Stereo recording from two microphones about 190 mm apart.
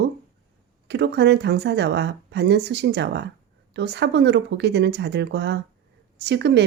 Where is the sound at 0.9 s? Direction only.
60° right (ahead or behind).